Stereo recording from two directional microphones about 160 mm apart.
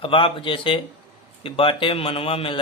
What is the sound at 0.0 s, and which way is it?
A man's voice, 35° left (ahead or behind).